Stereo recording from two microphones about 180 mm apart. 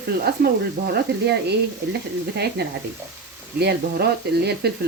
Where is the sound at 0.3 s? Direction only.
60° right (ahead or behind).